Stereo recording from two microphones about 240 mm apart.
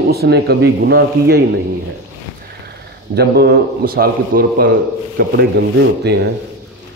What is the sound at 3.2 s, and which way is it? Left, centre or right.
A man's voice, right.